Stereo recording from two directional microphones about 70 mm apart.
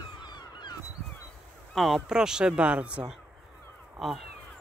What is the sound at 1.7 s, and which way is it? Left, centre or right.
Speech, centre.